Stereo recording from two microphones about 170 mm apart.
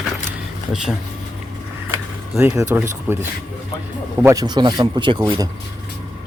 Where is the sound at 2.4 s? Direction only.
20° right (ahead or behind).